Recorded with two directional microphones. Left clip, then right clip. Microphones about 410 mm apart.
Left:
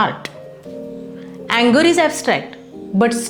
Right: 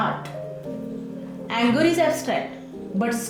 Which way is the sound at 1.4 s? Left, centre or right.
Left.